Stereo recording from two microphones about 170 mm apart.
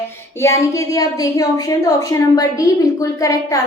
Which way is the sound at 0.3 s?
15° left (ahead or behind).